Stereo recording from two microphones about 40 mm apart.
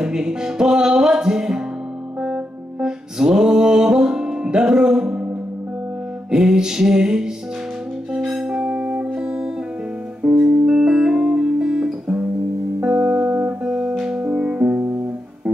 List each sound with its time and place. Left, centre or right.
0.0 s music: centre
6.3 s music: centre
8.8 s music: right
10.7 s music: centre
13.0 s music: right
14.2 s music: right